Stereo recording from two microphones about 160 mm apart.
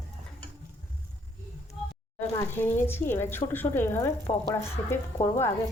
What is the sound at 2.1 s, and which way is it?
Speech, 15° left (ahead or behind).